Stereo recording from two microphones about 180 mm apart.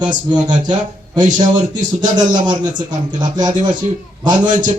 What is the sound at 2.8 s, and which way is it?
Speech, 25° right (ahead or behind).